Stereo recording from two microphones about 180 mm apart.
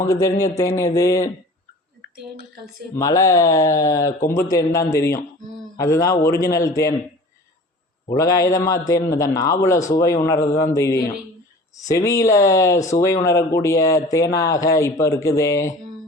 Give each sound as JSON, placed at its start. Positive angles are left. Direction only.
{"t": 0.0, "sound": "speech", "side_deg": 20}
{"t": 2.9, "sound": "speech", "side_deg": 20}
{"t": 8.1, "sound": "speech", "side_deg": 20}